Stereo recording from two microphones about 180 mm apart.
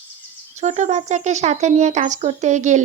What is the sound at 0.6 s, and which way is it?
Speech, 40° right (ahead or behind).